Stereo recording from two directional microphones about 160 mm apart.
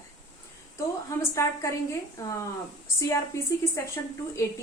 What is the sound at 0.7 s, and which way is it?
A woman's voice, 20° left (ahead or behind).